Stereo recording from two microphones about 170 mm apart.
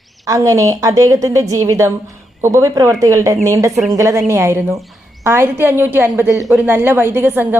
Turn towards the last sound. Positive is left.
turn(degrees=-10)  # may be behind; listen again after turning